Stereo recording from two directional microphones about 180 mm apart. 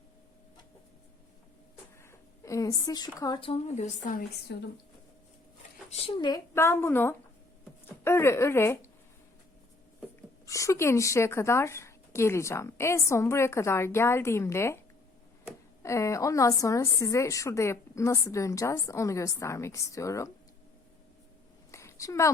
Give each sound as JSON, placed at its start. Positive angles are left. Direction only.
{"t": 2.0, "sound": "speech", "side_deg": 15}
{"t": 3.5, "sound": "a woman's voice", "side_deg": 40}
{"t": 4.5, "sound": "speech", "side_deg": 65}
{"t": 5.9, "sound": "a woman's voice", "side_deg": 25}
{"t": 10.4, "sound": "a woman's voice", "side_deg": 15}
{"t": 15.8, "sound": "a woman's voice", "side_deg": 15}
{"t": 21.7, "sound": "a sound", "side_deg": 15}